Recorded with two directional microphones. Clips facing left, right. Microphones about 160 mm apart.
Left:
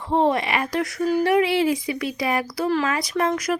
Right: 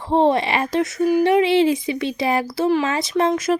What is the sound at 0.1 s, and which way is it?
A woman's voice, 30° right (ahead or behind).